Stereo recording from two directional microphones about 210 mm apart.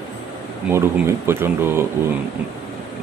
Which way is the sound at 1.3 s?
10° right (ahead or behind).